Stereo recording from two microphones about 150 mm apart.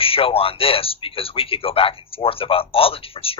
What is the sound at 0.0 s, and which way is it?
Speech, 40° left (ahead or behind).